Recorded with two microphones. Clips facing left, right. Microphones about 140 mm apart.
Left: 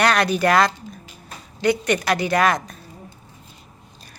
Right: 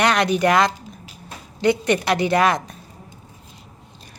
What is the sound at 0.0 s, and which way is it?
A woman's voice, 20° right (ahead or behind).